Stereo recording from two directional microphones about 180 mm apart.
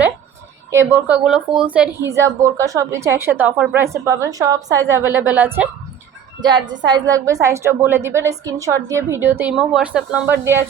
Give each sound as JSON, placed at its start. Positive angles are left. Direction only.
{"t": 0.7, "sound": "a woman's voice", "side_deg": -15}
{"t": 6.4, "sound": "a woman's voice", "side_deg": -25}